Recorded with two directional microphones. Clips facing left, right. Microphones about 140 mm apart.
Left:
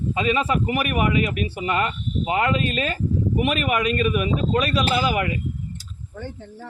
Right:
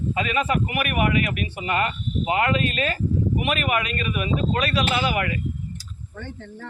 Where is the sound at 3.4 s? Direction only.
40° left (ahead or behind).